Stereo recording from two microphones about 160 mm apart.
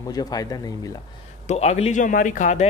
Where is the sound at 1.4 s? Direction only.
40° left (ahead or behind).